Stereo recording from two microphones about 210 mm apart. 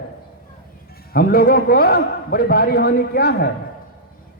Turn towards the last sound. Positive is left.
turn(degrees=45)  # may be behind; listen again after turning